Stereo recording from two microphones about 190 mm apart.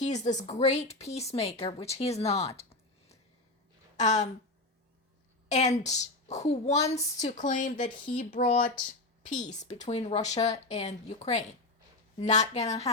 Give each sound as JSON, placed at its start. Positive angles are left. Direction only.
{"t": 0.0, "sound": "speech", "side_deg": 40}
{"t": 2.6, "sound": "a sound", "side_deg": 35}
{"t": 3.9, "sound": "speech", "side_deg": 40}
{"t": 5.5, "sound": "speech", "side_deg": 40}